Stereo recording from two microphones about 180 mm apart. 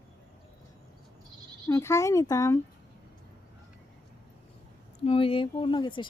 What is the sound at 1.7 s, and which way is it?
Speech, 15° left (ahead or behind).